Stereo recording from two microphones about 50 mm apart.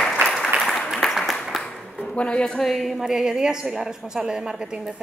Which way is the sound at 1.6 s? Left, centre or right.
Centre.